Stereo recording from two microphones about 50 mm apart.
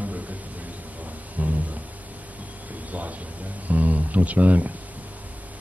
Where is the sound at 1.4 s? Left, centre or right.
Right.